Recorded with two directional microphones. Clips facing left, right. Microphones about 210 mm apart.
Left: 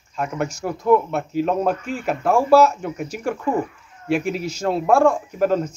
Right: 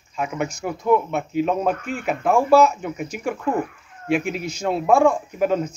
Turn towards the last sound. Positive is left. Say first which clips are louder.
# left 1 dB
turn(degrees=0)  # may be behind; listen again after turning